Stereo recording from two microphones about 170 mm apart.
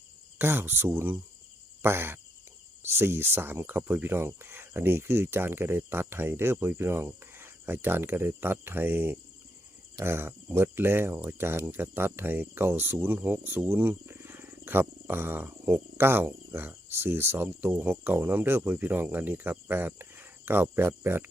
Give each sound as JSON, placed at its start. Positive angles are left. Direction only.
{"t": 0.3, "sound": "speech", "side_deg": -15}